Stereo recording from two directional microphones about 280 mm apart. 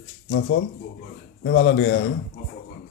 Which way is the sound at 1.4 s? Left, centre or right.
Left.